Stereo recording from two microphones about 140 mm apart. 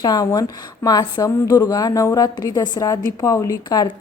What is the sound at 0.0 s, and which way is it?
Speech, 25° left (ahead or behind).